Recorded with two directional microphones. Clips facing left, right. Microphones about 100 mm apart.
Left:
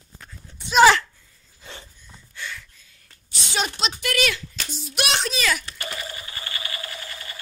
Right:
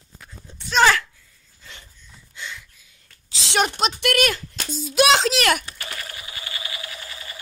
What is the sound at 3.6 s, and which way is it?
Speech, 50° right (ahead or behind).